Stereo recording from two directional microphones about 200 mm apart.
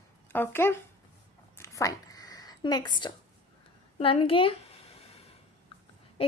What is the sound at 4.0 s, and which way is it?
Speech, 25° left (ahead or behind).